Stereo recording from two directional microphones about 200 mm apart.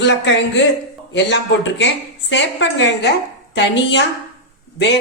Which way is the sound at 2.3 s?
65° left (ahead or behind).